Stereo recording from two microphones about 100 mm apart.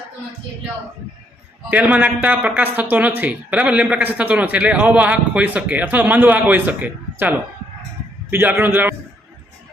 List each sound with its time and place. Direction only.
1.7 s a man's voice: 15° right (ahead or behind)